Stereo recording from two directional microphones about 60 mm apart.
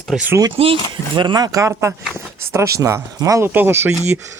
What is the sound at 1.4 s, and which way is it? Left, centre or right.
Speech, right.